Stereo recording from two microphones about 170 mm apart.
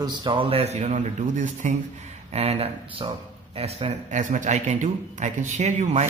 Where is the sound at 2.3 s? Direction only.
35° right (ahead or behind).